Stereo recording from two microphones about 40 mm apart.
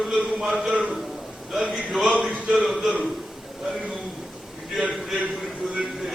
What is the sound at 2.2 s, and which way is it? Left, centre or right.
Speech, centre.